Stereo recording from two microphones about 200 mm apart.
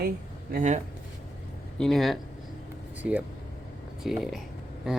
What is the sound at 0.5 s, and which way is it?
Speech, 40° right (ahead or behind).